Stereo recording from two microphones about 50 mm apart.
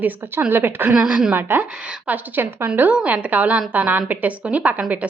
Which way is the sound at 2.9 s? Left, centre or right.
Right.